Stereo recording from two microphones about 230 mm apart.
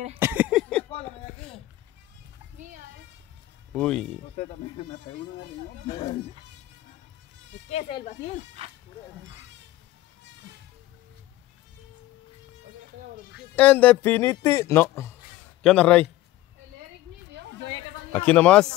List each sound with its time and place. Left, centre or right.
0.2 s a sound: centre
3.7 s a man's voice: centre
4.4 s speech: left
5.9 s speech: left
7.7 s speech: left
13.6 s a man's voice: centre
17.3 s a sound: right
18.1 s a man's voice: centre